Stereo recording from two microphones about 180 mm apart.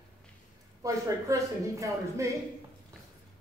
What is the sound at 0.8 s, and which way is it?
Speech, 15° right (ahead or behind).